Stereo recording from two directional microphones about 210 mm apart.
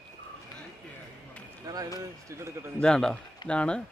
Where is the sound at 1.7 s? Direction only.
15° right (ahead or behind).